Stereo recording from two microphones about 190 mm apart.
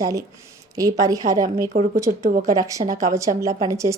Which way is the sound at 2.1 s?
40° right (ahead or behind).